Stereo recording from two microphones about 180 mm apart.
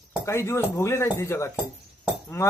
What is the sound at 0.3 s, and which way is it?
Speech, 15° left (ahead or behind).